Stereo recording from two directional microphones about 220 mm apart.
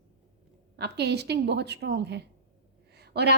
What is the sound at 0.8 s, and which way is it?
A woman's voice, 50° right (ahead or behind).